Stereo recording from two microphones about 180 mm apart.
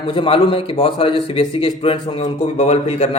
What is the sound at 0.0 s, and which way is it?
A man's voice, 30° left (ahead or behind).